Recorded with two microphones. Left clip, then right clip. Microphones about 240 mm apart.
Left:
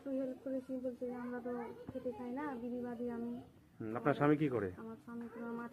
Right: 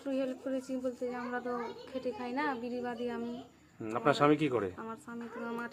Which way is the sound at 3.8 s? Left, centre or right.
Centre.